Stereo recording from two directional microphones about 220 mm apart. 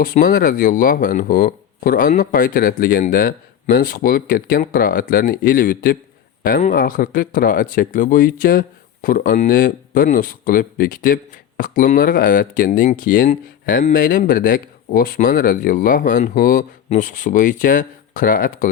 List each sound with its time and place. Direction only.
0.0 s speech: 40° left (ahead or behind)